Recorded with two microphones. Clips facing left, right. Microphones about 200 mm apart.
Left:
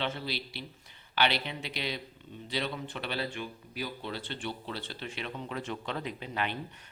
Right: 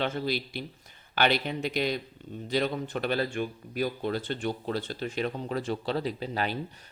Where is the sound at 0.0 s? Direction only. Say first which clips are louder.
Right 6 dB; 45° right (ahead or behind).